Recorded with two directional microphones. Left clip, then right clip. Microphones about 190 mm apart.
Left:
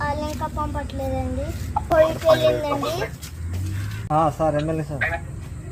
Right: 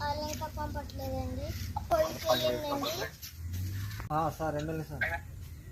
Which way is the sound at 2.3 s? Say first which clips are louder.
Left 11 dB; 25° left (ahead or behind).